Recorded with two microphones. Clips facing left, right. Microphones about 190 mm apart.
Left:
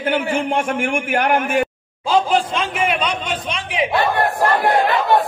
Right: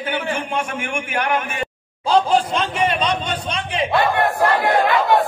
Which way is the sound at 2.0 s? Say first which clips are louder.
Right 1 dB; centre (ahead or behind).